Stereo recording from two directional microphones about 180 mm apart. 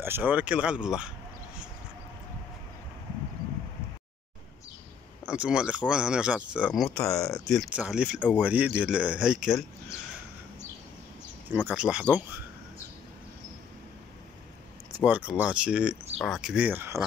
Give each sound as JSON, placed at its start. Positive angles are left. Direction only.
{"t": 0.0, "sound": "speech", "side_deg": -10}
{"t": 5.3, "sound": "speech", "side_deg": -5}
{"t": 7.1, "sound": "speech", "side_deg": 20}
{"t": 7.4, "sound": "speech", "side_deg": 0}
{"t": 11.5, "sound": "speech", "side_deg": -10}
{"t": 15.0, "sound": "speech", "side_deg": -10}